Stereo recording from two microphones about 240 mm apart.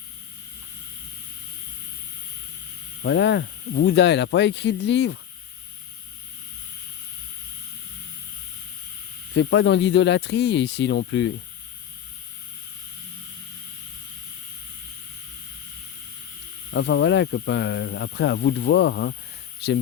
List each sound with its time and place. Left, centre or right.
3.0 s speech: left
9.3 s speech: left
16.7 s speech: left